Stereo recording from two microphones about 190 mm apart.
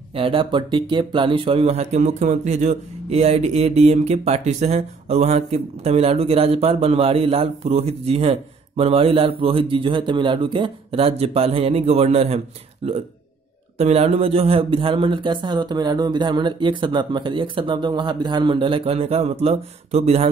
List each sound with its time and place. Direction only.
0.1 s speech: 30° right (ahead or behind)